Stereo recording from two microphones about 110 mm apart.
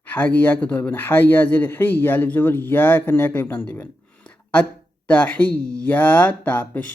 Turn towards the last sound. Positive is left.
turn(degrees=15)  # may be behind; listen again after turning